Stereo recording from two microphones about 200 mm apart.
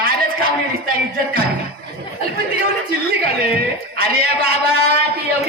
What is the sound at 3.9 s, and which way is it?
A man's voice, 50° right (ahead or behind).